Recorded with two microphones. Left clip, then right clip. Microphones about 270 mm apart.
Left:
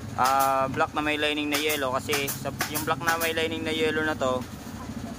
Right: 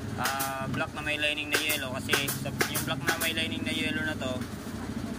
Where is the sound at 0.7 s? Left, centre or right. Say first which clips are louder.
Left 6 dB; centre.